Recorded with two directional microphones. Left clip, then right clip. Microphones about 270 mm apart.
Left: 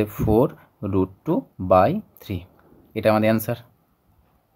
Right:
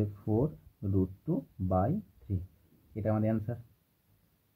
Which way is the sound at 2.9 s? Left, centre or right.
Left.